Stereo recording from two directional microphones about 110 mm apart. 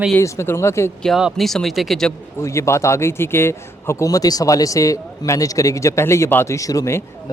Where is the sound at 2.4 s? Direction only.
25° left (ahead or behind).